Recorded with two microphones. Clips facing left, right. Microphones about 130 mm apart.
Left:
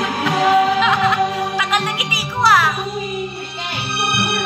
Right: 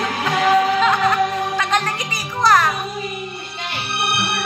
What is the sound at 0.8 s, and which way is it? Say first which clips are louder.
Music: left 1 dB; centre (ahead or behind).